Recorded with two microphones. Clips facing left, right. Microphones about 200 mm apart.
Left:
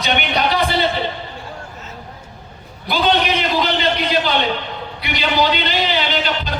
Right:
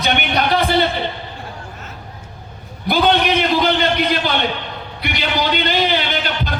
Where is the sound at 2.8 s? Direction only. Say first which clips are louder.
Right 2 dB; 50° right (ahead or behind).